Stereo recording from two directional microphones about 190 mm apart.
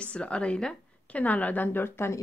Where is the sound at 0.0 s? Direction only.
5° left (ahead or behind).